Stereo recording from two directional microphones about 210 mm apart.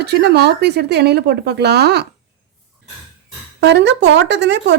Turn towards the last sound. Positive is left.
turn(degrees=-55)  # may be behind; listen again after turning